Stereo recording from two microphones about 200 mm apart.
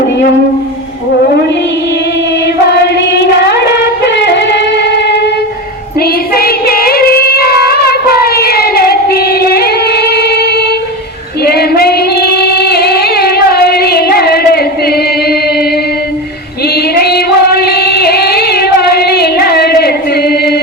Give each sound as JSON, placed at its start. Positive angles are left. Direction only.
{"t": 2.9, "sound": "singing", "side_deg": 55}
{"t": 6.0, "sound": "female singing", "side_deg": 50}